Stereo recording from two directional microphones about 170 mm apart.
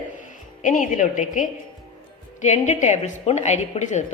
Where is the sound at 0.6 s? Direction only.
50° left (ahead or behind).